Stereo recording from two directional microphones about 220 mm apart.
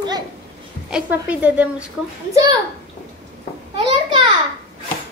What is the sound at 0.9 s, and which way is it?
A woman's voice, 5° right (ahead or behind).